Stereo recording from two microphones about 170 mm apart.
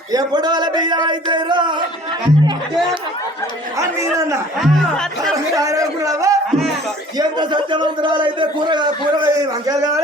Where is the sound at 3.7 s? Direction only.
20° right (ahead or behind).